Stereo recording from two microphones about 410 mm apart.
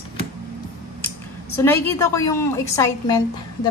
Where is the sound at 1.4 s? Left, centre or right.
Centre.